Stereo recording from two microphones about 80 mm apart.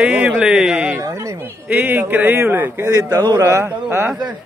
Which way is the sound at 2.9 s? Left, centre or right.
Right.